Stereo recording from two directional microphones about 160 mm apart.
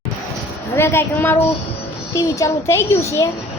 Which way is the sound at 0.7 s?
15° left (ahead or behind).